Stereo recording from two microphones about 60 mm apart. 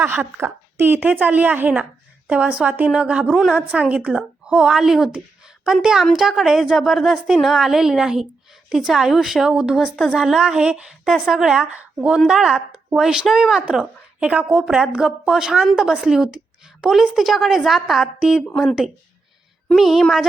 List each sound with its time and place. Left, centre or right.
0.0 s a woman's voice: right
0.3 s a sound: right
1.0 s a woman's voice: right; by 9.8 s centre
9.8 s a woman's voice: centre
10.2 s a woman's voice: centre
11.6 s a woman's voice: right; by 13.7 s centre
14.2 s a woman's voice: right; by 18.4 s centre
19.7 s a woman's voice: centre